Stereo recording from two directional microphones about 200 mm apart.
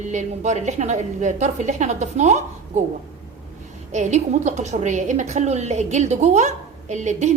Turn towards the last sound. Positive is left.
turn(degrees=-35)  # may be behind; listen again after turning